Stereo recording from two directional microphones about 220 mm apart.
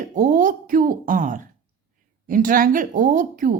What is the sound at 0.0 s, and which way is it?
A woman's voice, 35° right (ahead or behind).